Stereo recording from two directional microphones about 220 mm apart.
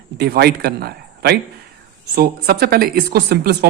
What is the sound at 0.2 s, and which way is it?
Speech, 45° right (ahead or behind).